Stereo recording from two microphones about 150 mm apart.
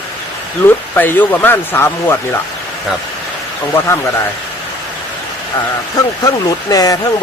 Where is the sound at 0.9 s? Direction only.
10° left (ahead or behind).